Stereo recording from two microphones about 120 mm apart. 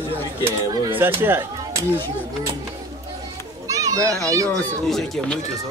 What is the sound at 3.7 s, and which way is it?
Speech, 30° right (ahead or behind).